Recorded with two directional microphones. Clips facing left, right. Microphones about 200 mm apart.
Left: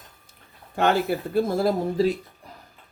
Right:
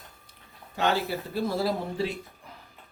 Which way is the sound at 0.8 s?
55° left (ahead or behind).